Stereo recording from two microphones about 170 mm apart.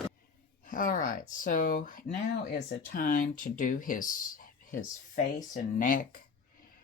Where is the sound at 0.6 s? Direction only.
55° left (ahead or behind).